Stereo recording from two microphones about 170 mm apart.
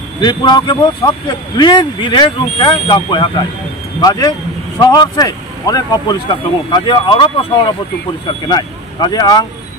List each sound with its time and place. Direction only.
0.2 s speech: 25° left (ahead or behind)